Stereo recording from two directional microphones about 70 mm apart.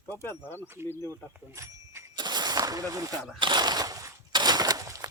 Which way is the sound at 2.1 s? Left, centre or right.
Right.